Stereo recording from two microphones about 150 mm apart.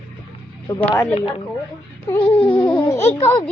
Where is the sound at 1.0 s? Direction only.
40° left (ahead or behind).